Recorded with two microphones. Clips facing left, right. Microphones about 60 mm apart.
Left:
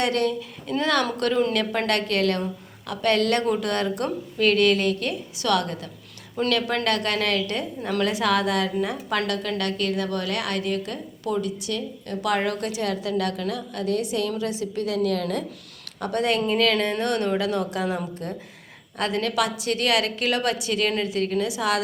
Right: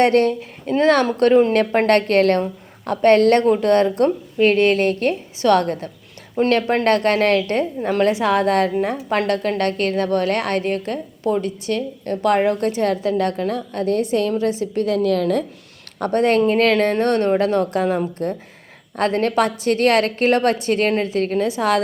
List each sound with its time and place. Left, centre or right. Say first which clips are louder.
0.0 s a woman's voice: right 8 dB; right
8.4 s a woman's voice: right 6 dB; right